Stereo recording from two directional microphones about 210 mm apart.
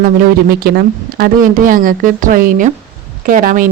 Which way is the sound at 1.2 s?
40° right (ahead or behind).